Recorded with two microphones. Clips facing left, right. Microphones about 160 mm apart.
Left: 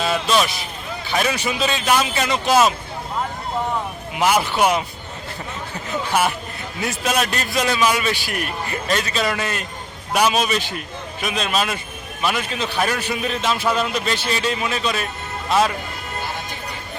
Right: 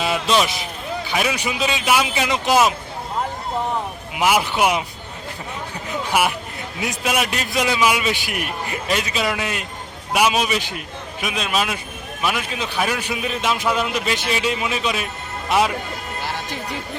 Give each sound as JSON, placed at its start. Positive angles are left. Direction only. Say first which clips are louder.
{"t": 0.0, "sound": "speech", "louder": "even", "side_deg": -15}
{"t": 1.1, "sound": "a man's voice", "louder": "left 2 dB", "side_deg": -10}
{"t": 4.1, "sound": "a man's voice", "louder": "even", "side_deg": -5}
{"t": 6.8, "sound": "a man's voice", "louder": "left 1 dB", "side_deg": -10}